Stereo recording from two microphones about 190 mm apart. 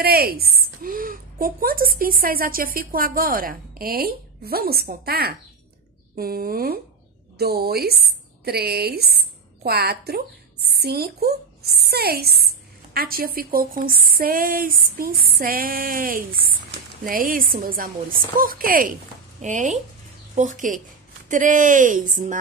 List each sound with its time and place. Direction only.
0.0 s a woman's voice: 55° right (ahead or behind)